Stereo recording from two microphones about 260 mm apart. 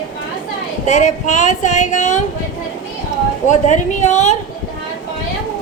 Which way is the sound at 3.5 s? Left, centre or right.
Left.